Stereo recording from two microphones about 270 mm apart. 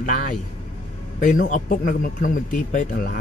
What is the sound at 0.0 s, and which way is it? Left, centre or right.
A man's voice, left.